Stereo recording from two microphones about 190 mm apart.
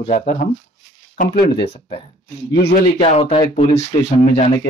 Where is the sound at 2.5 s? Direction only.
60° left (ahead or behind).